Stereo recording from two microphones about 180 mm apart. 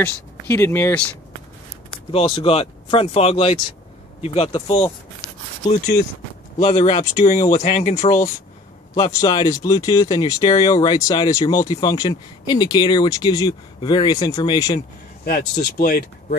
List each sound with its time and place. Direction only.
0.0 s speech: 15° left (ahead or behind)
2.1 s speech: 30° left (ahead or behind)
6.6 s speech: 40° left (ahead or behind)
8.9 s speech: 20° left (ahead or behind)
15.2 s speech: 55° left (ahead or behind)